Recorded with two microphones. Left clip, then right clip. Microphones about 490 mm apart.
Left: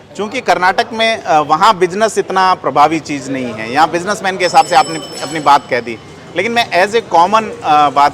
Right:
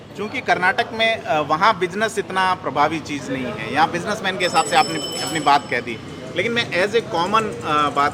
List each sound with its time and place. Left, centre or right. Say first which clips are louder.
0.2 s a man's voice: left 7 dB; left